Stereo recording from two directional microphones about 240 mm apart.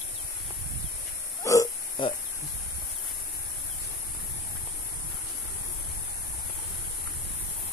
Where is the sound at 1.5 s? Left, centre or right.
Centre.